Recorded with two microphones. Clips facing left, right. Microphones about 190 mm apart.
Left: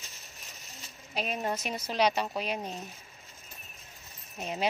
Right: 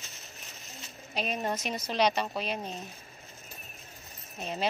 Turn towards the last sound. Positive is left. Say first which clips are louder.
# left 1 dB
turn(degrees=15)  # may be behind; listen again after turning